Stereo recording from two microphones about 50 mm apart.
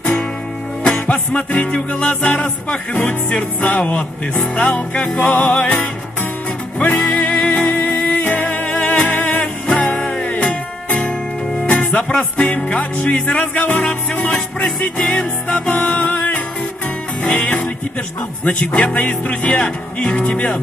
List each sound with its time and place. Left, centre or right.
0.9 s music: left
9.4 s music: centre
10.0 s music: left